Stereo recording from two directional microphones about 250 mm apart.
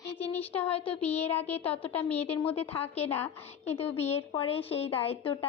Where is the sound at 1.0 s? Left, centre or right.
Centre.